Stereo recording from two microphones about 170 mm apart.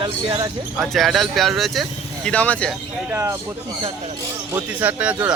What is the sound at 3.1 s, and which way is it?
Speech, 15° right (ahead or behind).